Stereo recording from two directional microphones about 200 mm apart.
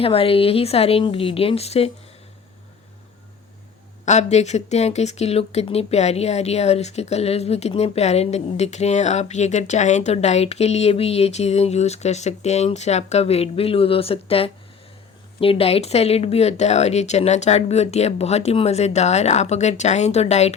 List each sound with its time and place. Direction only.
0.0 s speech: 30° left (ahead or behind)
4.0 s speech: 35° left (ahead or behind)